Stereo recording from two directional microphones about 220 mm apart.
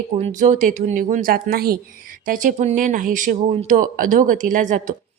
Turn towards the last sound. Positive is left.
turn(degrees=-35)  # may be behind; listen again after turning